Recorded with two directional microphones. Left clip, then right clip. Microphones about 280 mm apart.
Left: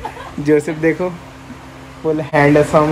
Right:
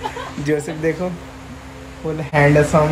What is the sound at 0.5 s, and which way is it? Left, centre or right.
Speech, left.